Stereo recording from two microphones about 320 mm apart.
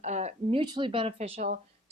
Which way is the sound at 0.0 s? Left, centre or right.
Right.